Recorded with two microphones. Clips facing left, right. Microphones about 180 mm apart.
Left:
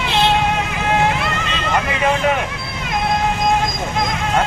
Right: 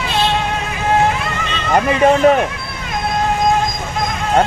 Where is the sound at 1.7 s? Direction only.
40° right (ahead or behind).